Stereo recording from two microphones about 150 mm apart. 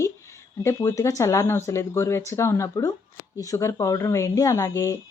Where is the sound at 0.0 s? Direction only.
20° left (ahead or behind).